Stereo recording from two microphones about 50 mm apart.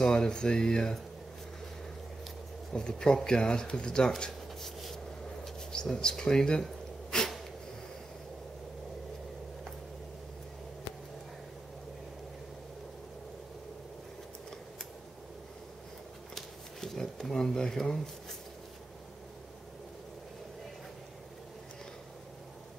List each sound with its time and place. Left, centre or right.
0.0 s speech: centre
2.7 s speech: centre
4.6 s rub: centre
5.7 s a sound: centre
16.3 s shuffling cards: centre